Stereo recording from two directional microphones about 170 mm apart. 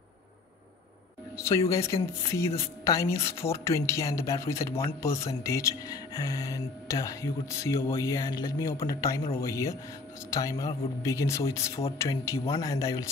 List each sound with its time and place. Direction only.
1.3 s speech: 15° left (ahead or behind)